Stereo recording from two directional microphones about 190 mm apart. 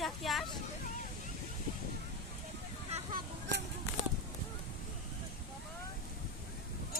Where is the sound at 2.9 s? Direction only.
35° right (ahead or behind).